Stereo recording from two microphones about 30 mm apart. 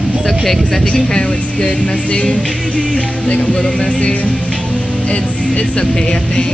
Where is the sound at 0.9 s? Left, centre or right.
Left.